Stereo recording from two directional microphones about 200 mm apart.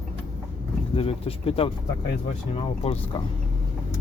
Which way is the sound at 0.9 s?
30° left (ahead or behind).